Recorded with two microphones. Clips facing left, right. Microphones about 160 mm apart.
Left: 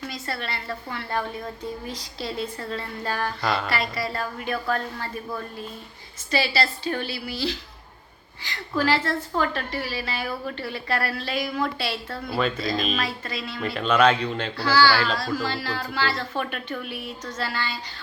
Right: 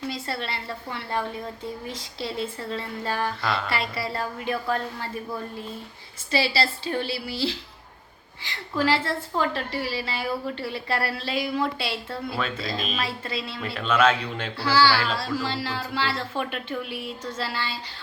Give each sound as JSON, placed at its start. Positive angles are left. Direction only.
{"t": 0.1, "sound": "a woman's voice", "side_deg": -30}
{"t": 12.6, "sound": "speech", "side_deg": 0}
{"t": 13.2, "sound": "a woman's voice", "side_deg": -30}
{"t": 13.7, "sound": "speech", "side_deg": 0}
{"t": 14.7, "sound": "a woman's voice", "side_deg": -30}
{"t": 14.9, "sound": "speech", "side_deg": -5}
{"t": 15.4, "sound": "a woman's voice", "side_deg": -25}